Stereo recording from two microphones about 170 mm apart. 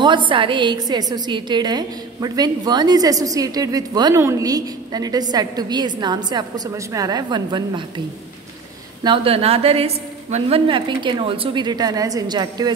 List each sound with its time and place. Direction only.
0.0 s a woman's voice: 30° right (ahead or behind)
9.0 s a woman's voice: 30° right (ahead or behind)